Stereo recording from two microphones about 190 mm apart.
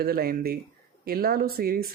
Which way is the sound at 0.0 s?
55° right (ahead or behind).